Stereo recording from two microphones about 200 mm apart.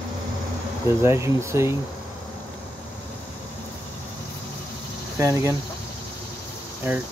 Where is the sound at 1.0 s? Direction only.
15° right (ahead or behind).